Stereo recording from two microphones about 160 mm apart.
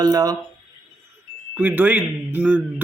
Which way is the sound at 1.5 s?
10° right (ahead or behind).